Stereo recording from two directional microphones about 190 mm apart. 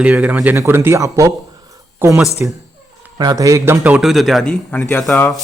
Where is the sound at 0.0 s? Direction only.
5° right (ahead or behind).